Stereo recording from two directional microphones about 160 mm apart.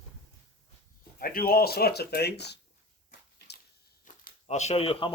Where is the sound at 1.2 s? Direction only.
65° left (ahead or behind); by 2.6 s 90° left.